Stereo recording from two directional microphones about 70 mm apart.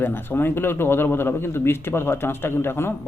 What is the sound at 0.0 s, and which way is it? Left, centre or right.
A man's voice, left.